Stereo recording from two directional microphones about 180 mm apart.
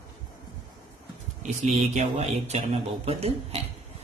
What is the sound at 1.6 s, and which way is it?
A man's voice, 40° right (ahead or behind).